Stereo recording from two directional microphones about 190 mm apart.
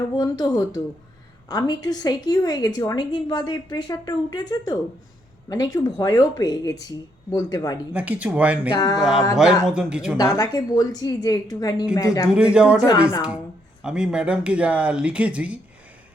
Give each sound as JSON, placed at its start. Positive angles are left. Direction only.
{"t": 0.2, "sound": "a woman's voice", "side_deg": 20}
{"t": 7.9, "sound": "speech", "side_deg": -10}
{"t": 8.7, "sound": "a woman's voice", "side_deg": 20}
{"t": 9.0, "sound": "speech", "side_deg": 0}
{"t": 10.2, "sound": "a woman's voice", "side_deg": 20}
{"t": 12.3, "sound": "speech", "side_deg": -5}
{"t": 13.8, "sound": "speech", "side_deg": -5}